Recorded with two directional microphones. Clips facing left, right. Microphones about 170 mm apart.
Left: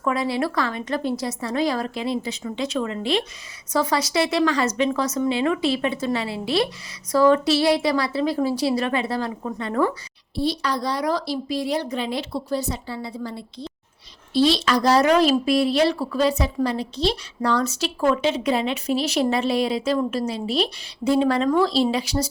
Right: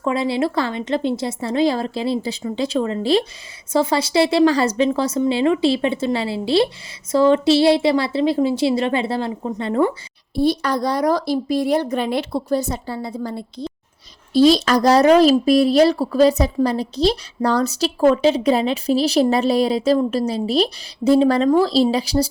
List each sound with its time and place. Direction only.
0.0 s a woman's voice: 25° right (ahead or behind)
10.3 s speech: 50° right (ahead or behind); by 22.3 s 35° right (ahead or behind)